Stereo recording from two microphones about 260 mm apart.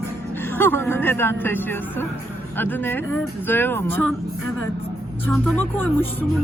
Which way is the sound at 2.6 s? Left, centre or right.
Centre.